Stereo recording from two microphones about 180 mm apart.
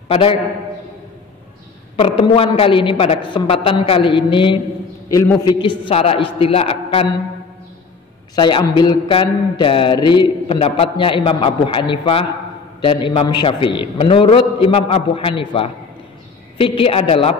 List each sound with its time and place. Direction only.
0.1 s a man's voice: 30° left (ahead or behind)
2.0 s a man's voice: 30° left (ahead or behind)
5.1 s a man's voice: 15° left (ahead or behind); by 7.1 s 35° left (ahead or behind)
8.4 s a man's voice: 25° left (ahead or behind)